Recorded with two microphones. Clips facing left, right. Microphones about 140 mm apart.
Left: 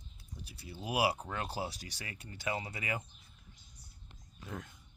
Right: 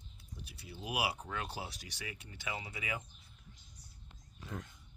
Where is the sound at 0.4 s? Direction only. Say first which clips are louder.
Left 3 dB; 35° left (ahead or behind).